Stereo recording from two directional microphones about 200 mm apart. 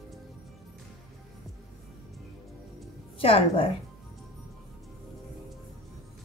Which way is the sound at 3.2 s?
30° left (ahead or behind).